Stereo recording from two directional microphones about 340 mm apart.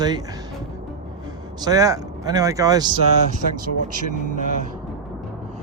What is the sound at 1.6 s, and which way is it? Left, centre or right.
Speech, centre.